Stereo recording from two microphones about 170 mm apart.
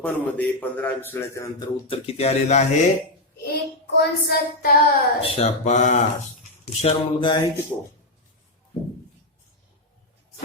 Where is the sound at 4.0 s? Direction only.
70° left (ahead or behind).